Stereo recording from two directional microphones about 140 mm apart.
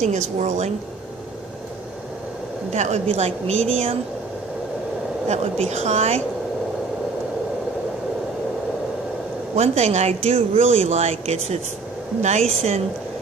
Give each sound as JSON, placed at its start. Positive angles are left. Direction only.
{"t": 0.0, "sound": "a woman's voice", "side_deg": -60}
{"t": 2.7, "sound": "speech", "side_deg": -55}
{"t": 5.7, "sound": "speech", "side_deg": -55}
{"t": 9.6, "sound": "speech", "side_deg": -50}